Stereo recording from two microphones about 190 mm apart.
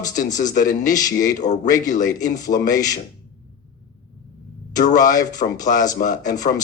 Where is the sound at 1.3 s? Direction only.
40° left (ahead or behind).